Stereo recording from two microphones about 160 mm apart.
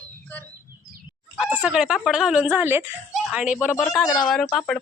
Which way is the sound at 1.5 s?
5° right (ahead or behind).